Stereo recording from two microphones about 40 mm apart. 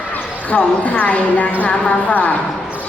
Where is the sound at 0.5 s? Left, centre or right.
Left.